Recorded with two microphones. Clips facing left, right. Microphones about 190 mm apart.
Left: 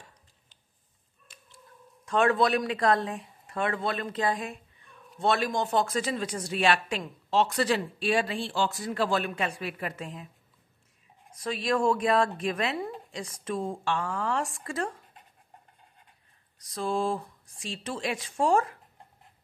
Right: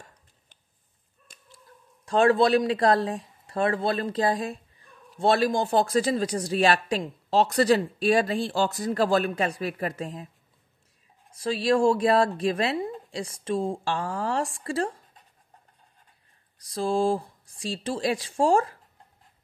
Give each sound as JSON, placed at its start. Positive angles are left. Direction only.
{"t": 1.2, "sound": "chicken", "side_deg": -40}
{"t": 2.0, "sound": "speech", "side_deg": -30}
{"t": 11.3, "sound": "speech", "side_deg": -30}
{"t": 16.5, "sound": "speech", "side_deg": -30}